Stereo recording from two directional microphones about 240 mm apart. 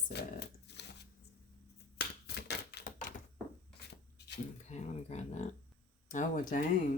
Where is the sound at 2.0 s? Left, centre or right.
Left.